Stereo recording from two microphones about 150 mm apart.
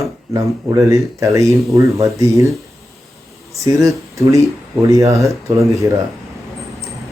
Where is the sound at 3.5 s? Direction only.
20° right (ahead or behind).